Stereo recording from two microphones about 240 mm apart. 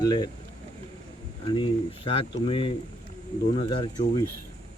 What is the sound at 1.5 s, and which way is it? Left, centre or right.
Speech, left.